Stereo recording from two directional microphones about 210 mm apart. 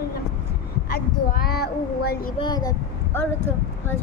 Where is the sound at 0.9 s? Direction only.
45° left (ahead or behind).